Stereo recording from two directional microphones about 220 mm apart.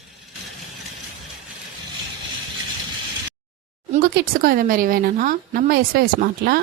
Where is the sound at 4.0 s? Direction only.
45° right (ahead or behind).